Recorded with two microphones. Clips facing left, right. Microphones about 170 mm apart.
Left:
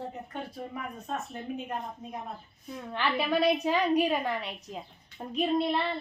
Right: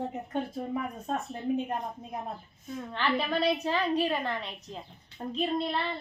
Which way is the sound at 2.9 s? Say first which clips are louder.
Left 1 dB; 10° left (ahead or behind).